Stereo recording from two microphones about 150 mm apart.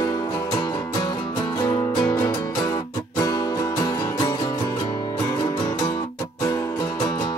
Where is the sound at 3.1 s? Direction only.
25° left (ahead or behind).